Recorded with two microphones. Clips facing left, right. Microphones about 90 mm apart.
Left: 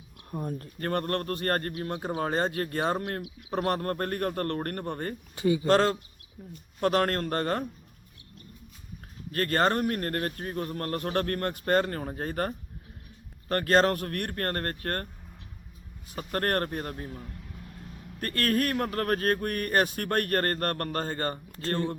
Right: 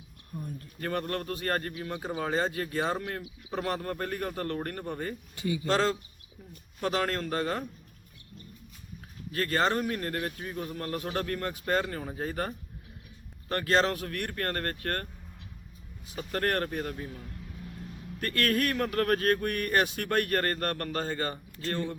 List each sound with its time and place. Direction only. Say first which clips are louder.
0.3 s speech: left 6 dB; 50° left (ahead or behind)
5.4 s speech: left 7 dB; 30° left (ahead or behind)
5.6 s speech: left 2 dB; 55° left (ahead or behind)
9.3 s speech: left 2 dB; 50° left (ahead or behind); by 15.0 s 30° left (ahead or behind)
16.0 s speech: left 1 dB; 45° left (ahead or behind)
18.2 s speech: left 1 dB; 40° left (ahead or behind)